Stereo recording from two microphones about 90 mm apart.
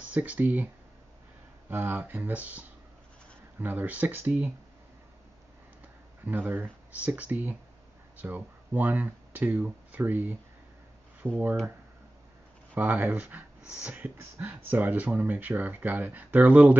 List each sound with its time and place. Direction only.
0.0 s speech: 15° right (ahead or behind)
1.7 s speech: 25° right (ahead or behind)
6.2 s speech: 20° right (ahead or behind)
12.7 s speech: 20° right (ahead or behind)